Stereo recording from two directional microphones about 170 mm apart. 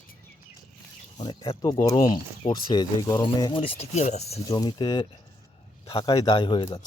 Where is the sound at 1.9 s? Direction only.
30° left (ahead or behind).